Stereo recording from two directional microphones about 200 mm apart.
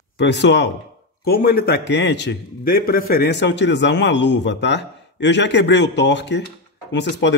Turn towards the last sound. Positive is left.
turn(degrees=60)  # may be behind; listen again after turning